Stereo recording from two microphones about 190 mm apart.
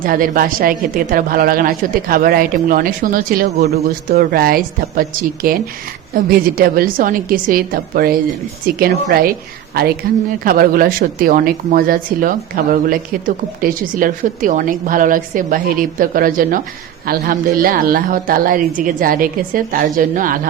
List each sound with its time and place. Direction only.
0.0 s speech: 50° right (ahead or behind)